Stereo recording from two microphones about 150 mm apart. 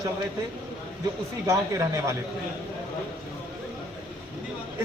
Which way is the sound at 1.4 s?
20° right (ahead or behind).